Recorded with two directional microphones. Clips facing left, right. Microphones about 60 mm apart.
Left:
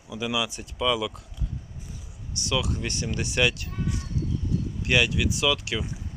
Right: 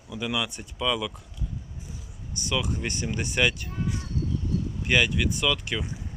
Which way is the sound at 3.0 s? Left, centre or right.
Centre.